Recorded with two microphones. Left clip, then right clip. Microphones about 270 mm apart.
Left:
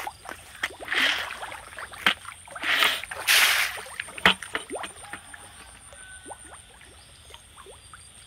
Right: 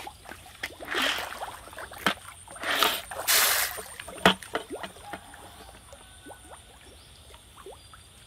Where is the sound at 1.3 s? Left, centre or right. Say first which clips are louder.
Left 1 dB; centre.